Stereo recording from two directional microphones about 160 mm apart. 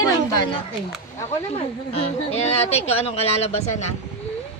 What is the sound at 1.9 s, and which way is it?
Speech, 40° left (ahead or behind).